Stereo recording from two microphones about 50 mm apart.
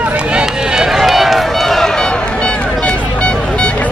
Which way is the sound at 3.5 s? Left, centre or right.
Left.